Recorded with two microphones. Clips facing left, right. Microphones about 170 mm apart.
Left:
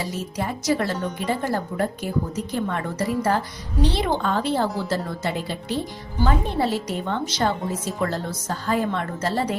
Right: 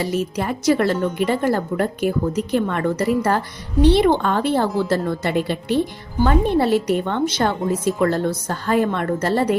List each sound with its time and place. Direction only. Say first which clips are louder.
0.0 s a woman's voice: right 6 dB; 65° right (ahead or behind)